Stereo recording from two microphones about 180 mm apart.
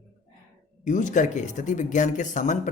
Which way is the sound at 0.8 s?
45° left (ahead or behind).